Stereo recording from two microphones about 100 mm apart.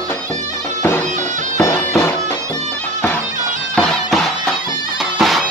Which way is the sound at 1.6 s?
25° left (ahead or behind).